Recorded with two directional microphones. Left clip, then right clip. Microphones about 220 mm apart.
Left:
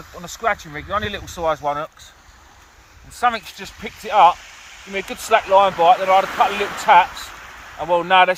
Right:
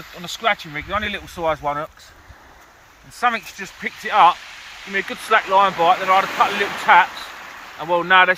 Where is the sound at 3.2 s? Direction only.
30° left (ahead or behind).